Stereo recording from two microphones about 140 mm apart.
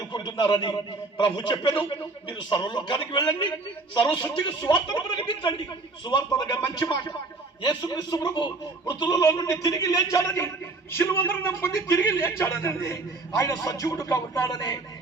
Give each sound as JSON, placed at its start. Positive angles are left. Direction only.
{"t": 0.1, "sound": "a man's voice", "side_deg": 35}